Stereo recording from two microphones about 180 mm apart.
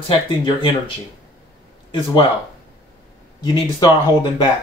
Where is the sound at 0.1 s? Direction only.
30° left (ahead or behind).